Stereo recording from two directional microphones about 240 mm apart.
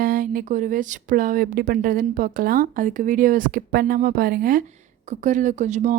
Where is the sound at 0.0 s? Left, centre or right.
Right.